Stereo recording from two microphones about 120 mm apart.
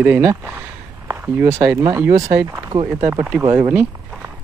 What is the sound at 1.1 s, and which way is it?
Speech, 20° right (ahead or behind).